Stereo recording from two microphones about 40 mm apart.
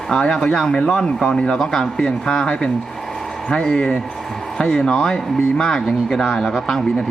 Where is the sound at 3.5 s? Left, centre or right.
Centre.